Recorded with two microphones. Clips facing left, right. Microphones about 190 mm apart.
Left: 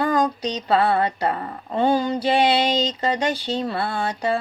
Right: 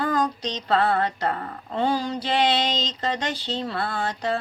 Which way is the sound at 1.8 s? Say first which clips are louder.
Left 5 dB; 55° left (ahead or behind).